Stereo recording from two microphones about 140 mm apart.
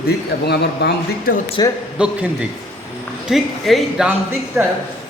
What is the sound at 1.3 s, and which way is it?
Speech, 90° left.